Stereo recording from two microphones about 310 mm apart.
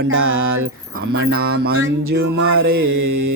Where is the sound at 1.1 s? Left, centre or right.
Right.